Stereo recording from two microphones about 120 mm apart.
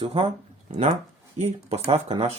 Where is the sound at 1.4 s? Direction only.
65° right (ahead or behind).